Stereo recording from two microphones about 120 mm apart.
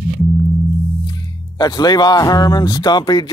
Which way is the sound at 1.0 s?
35° left (ahead or behind).